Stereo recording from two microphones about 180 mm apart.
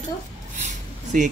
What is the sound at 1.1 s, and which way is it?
Speech, 50° right (ahead or behind).